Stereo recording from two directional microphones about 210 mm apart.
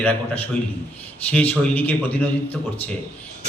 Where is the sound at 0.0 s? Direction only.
5° left (ahead or behind).